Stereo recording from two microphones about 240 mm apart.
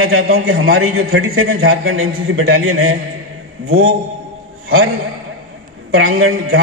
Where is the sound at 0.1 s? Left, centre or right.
Right.